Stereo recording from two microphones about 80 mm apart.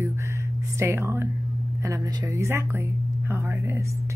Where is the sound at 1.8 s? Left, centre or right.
Right.